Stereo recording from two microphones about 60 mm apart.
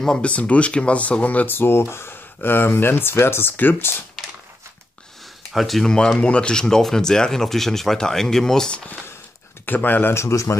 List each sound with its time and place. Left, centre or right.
0.2 s speech: left
5.5 s speech: centre
9.7 s speech: left
10.1 s a man's voice: left